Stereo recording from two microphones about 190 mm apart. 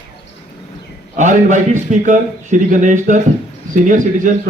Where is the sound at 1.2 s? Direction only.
40° right (ahead or behind).